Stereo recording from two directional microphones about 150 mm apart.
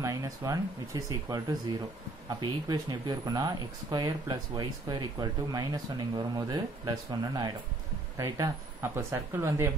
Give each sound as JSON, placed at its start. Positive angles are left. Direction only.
{"t": 0.0, "sound": "speech", "side_deg": -20}